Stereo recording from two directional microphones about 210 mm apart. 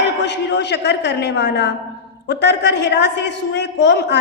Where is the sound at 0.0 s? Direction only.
55° left (ahead or behind).